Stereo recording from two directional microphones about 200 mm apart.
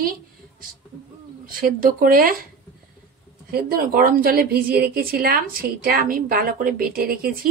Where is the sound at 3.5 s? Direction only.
45° right (ahead or behind).